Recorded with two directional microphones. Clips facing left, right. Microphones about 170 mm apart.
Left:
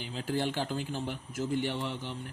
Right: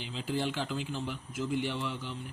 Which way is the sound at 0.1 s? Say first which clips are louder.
Left 1 dB; 45° left (ahead or behind).